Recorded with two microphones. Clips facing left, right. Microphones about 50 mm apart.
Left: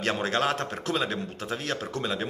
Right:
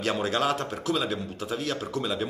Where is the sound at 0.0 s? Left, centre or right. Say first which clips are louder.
Even; left.